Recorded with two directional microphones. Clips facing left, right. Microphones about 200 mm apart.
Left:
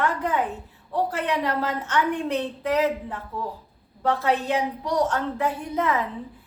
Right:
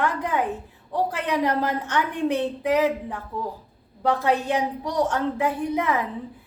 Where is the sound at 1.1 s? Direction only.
15° right (ahead or behind).